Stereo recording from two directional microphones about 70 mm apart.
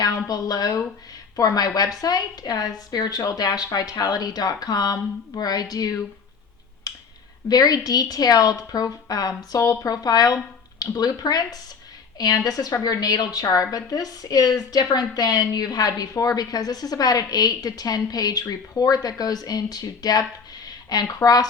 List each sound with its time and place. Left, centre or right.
0.3 s a woman's voice: left
7.5 s a woman's voice: left